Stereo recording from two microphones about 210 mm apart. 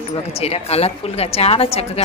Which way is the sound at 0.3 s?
30° left (ahead or behind).